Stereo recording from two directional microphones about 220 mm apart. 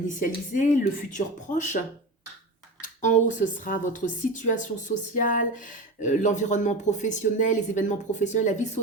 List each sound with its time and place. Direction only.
0.2 s speech: 35° left (ahead or behind)
2.8 s speech: 35° left (ahead or behind)